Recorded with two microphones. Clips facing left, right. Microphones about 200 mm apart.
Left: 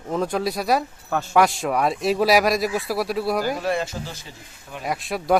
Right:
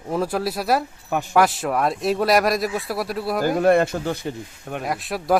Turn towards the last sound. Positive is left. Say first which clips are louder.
# even
turn(degrees=0)  # may be behind; listen again after turning